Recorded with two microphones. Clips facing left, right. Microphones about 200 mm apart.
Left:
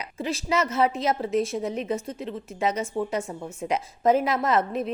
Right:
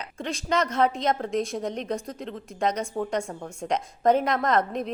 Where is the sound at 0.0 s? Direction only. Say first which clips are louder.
Left 3 dB; 5° left (ahead or behind).